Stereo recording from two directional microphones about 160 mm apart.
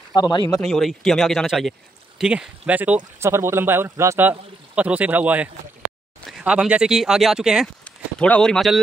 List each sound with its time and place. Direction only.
0.1 s speech: 25° left (ahead or behind)
0.6 s a man's voice: centre (ahead or behind)
7.8 s speech: 5° left (ahead or behind)